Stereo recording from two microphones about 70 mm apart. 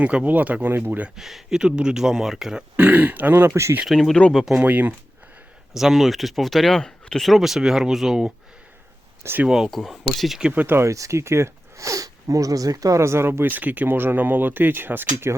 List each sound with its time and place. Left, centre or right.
0.0 s speech: centre
1.1 s speech: centre
2.7 s speech: right
3.8 s speech: centre
4.5 s speech: right
5.7 s speech: centre
9.5 s speech: centre
10.5 s speech: right
10.8 s speech: right
13.0 s speech: right